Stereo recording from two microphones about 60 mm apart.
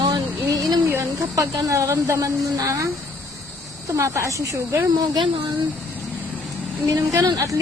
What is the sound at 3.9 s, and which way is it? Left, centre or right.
Speech, right.